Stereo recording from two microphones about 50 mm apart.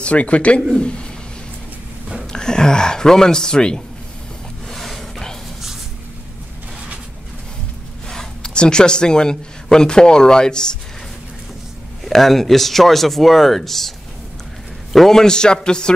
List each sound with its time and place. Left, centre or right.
0.0 s speech: left
2.3 s speech: centre
4.6 s a sound: centre
8.1 s speech: centre
12.0 s speech: centre